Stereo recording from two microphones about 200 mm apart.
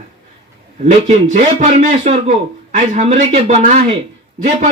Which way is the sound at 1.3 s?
35° right (ahead or behind).